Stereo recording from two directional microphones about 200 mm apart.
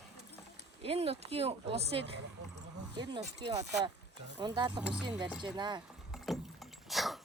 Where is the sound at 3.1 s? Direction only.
20° right (ahead or behind).